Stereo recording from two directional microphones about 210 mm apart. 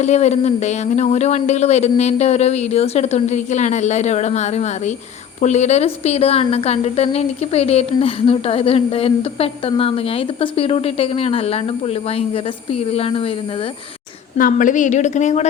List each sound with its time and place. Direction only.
0.0 s a woman's voice: 30° left (ahead or behind)
12.9 s a woman's voice: 30° left (ahead or behind)
14.3 s speech: 40° left (ahead or behind)